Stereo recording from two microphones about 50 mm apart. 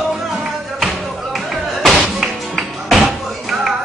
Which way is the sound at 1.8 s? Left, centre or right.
Centre.